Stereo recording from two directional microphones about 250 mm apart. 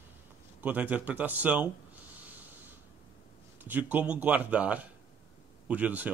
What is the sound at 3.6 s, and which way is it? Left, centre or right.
Speech, centre.